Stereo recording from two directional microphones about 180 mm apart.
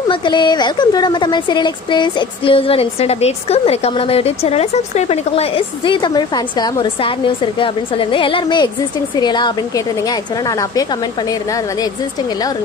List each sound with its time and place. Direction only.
0.1 s a woman's voice: 25° left (ahead or behind)